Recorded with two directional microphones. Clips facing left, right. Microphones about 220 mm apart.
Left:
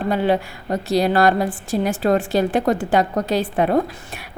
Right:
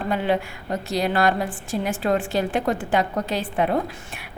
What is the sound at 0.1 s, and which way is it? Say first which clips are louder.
A woman's voice: left 3 dB; 35° left (ahead or behind).